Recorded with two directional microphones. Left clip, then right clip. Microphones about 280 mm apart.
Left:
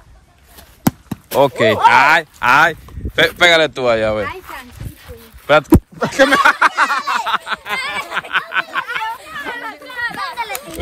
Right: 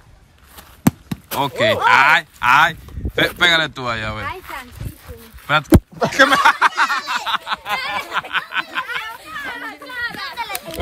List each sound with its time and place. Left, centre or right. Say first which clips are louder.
0.8 s basketball bounce: left 1 dB; centre
1.5 s cattle: left 2 dB; left
1.9 s speech: left 2 dB; centre
5.5 s a sound: left 4 dB; centre
6.0 s speech: left 1 dB; centre
6.4 s speech: left 2 dB; centre
9.3 s a sound: left 2 dB; centre